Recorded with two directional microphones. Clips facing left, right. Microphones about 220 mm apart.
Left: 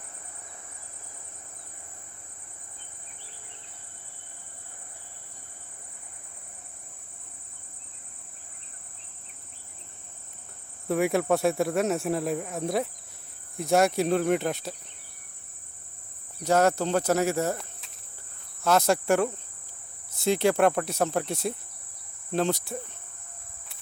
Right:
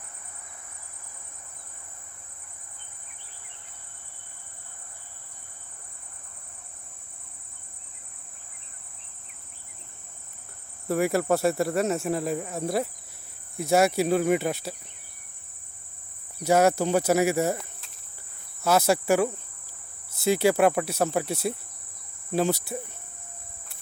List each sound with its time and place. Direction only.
10.8 s speech: centre (ahead or behind)
16.4 s speech: 10° right (ahead or behind)
22.3 s cricket: 5° right (ahead or behind)